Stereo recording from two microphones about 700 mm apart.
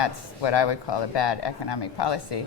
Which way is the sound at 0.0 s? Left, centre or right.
Left.